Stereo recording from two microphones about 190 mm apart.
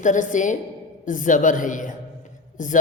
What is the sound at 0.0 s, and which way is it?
A woman's voice, 40° left (ahead or behind).